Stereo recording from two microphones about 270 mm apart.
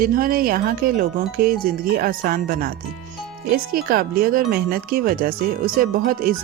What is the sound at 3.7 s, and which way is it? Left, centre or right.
Speech, right.